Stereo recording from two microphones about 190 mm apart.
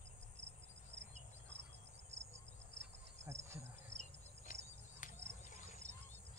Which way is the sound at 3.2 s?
15° right (ahead or behind).